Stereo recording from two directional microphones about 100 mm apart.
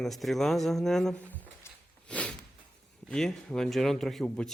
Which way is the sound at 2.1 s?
15° left (ahead or behind).